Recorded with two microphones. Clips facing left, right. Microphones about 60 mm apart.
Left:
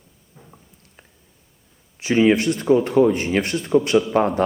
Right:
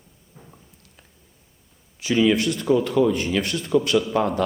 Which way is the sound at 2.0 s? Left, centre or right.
Left.